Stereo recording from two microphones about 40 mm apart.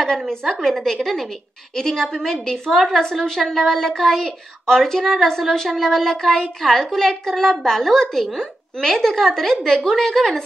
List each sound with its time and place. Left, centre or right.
0.0 s a woman's voice: centre
2.7 s a woman's voice: centre